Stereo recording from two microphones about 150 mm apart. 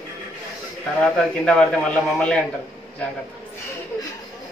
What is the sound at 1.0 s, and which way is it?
Chuckle, 5° left (ahead or behind).